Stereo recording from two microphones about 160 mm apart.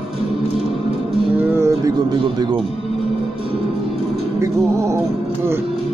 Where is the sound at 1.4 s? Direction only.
15° right (ahead or behind).